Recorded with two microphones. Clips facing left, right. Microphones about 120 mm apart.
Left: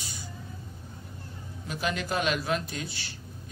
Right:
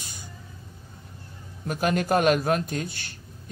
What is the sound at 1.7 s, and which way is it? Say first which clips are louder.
Mantra: right 7 dB; 50° right (ahead or behind).